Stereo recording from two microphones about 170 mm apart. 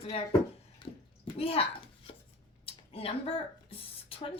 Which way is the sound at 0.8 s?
30° left (ahead or behind).